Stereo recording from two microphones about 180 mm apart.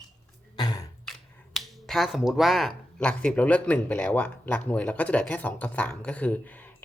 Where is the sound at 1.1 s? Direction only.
Centre (ahead or behind).